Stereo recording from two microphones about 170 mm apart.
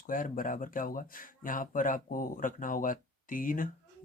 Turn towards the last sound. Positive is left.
turn(degrees=55)  # may be behind; listen again after turning